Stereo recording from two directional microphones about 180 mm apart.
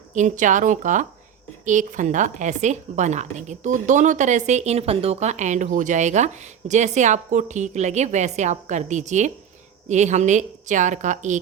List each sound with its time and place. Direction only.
0.1 s a woman's voice: 45° right (ahead or behind)